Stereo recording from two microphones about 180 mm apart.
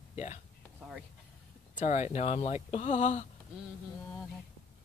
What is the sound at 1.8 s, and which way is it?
Speech, 40° left (ahead or behind).